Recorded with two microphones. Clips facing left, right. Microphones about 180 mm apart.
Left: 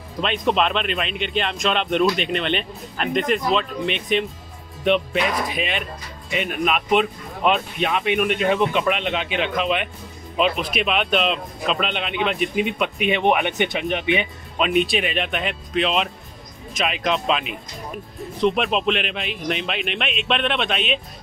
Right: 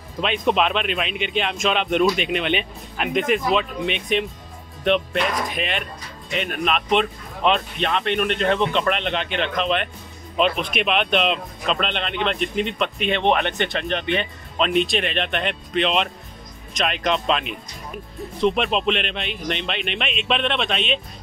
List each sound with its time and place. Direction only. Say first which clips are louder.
0.2 s speech: even; centre (ahead or behind)